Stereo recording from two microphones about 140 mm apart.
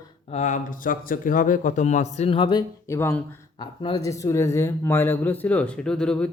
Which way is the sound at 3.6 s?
35° left (ahead or behind).